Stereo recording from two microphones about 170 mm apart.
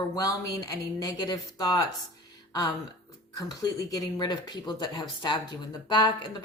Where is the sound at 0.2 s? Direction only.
20° left (ahead or behind).